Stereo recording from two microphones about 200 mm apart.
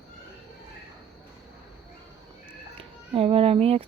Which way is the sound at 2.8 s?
25° right (ahead or behind).